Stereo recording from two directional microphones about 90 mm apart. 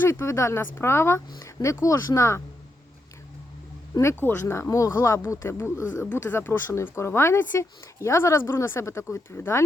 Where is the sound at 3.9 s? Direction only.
30° left (ahead or behind).